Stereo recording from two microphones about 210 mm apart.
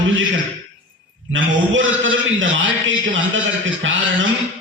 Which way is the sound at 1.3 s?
65° right (ahead or behind).